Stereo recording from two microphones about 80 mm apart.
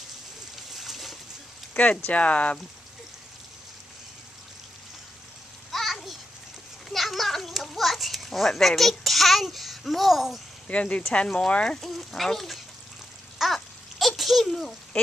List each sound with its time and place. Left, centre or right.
0.7 s splash: centre
1.7 s speech: centre
5.7 s a sound: centre
6.9 s children playing: centre
10.7 s speech: centre
13.4 s babbling: centre